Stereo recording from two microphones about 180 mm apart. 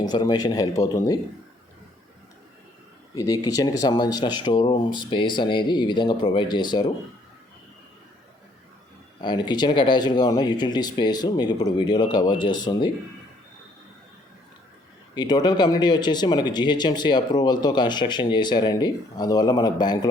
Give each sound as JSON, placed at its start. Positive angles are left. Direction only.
{"t": 0.1, "sound": "speech", "side_deg": 25}
{"t": 3.4, "sound": "speech", "side_deg": 20}
{"t": 9.2, "sound": "speech", "side_deg": 25}
{"t": 15.1, "sound": "speech", "side_deg": 25}